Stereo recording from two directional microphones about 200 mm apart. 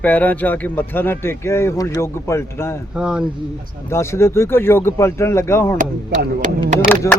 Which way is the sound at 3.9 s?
15° left (ahead or behind).